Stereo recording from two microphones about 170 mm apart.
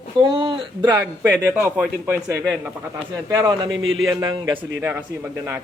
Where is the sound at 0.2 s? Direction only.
30° right (ahead or behind).